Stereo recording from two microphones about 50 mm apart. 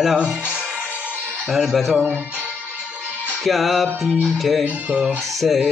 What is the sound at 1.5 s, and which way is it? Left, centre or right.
Music, centre.